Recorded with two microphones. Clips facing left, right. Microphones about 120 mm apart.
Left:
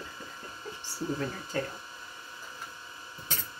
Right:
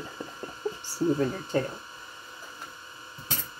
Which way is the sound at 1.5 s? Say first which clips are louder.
Right 6 dB; 30° right (ahead or behind).